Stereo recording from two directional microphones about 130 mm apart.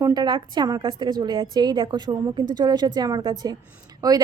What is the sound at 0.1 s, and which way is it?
A woman's voice, 35° right (ahead or behind).